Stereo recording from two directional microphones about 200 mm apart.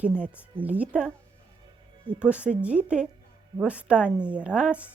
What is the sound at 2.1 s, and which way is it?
A woman's voice, 5° right (ahead or behind).